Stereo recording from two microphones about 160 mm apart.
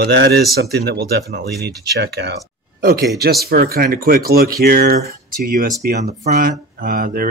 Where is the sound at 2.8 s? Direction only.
70° right (ahead or behind).